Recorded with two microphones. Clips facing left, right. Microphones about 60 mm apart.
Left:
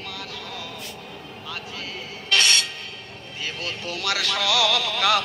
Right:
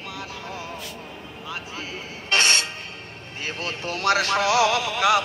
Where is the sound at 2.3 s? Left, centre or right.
Right.